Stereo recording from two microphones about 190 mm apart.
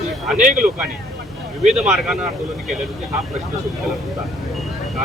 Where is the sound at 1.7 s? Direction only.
5° right (ahead or behind).